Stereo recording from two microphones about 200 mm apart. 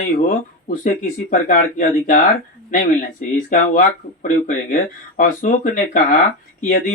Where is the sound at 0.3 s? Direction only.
40° left (ahead or behind).